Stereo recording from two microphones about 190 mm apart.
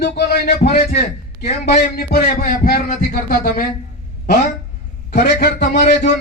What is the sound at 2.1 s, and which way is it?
Speech, 50° left (ahead or behind).